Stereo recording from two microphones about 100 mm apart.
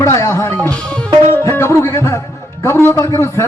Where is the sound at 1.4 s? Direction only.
25° left (ahead or behind).